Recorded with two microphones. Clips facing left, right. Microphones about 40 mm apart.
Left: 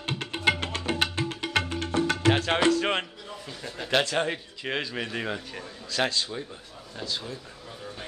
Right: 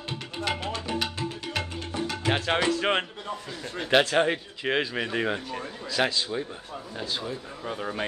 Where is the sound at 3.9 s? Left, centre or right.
Centre.